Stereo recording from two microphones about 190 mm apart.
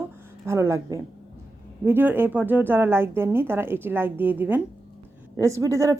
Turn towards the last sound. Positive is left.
turn(degrees=-15)  # may be behind; listen again after turning